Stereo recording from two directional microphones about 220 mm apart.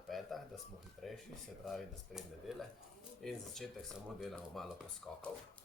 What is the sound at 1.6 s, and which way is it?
Speech, centre (ahead or behind).